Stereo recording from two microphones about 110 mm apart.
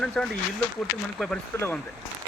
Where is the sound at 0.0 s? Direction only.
5° left (ahead or behind).